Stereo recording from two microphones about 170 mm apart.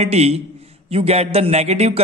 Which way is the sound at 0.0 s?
40° right (ahead or behind).